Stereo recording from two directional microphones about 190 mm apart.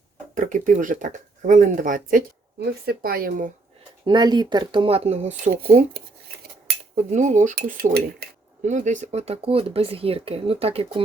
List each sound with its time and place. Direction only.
0.3 s speech: 40° right (ahead or behind)
4.0 s speech: 25° right (ahead or behind)
6.9 s speech: 40° right (ahead or behind)
7.8 s speech: 55° right (ahead or behind)
8.6 s speech: 40° right (ahead or behind)